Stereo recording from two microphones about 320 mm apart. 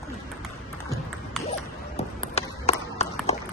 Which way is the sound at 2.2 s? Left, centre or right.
Centre.